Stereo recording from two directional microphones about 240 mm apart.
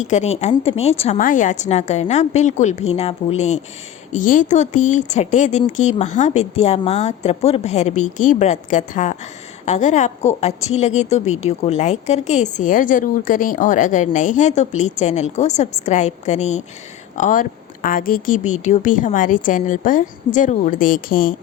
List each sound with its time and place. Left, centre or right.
0.0 s a woman's voice: left